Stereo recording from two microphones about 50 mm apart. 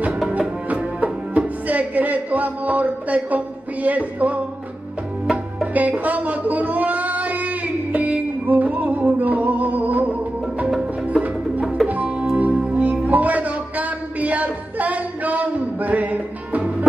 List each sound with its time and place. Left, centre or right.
0.7 s music: right
5.8 s a sound: right
11.9 s music: right